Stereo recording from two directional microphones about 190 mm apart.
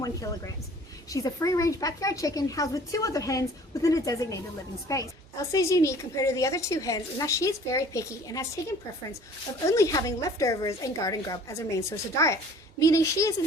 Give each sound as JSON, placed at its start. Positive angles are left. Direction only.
{"t": 1.1, "sound": "a woman's voice", "side_deg": 20}
{"t": 9.6, "sound": "a woman's voice", "side_deg": 15}